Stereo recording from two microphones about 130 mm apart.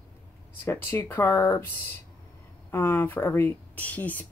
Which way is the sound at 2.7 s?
15° left (ahead or behind).